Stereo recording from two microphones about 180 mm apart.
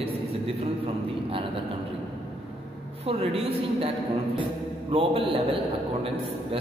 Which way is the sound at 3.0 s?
30° right (ahead or behind).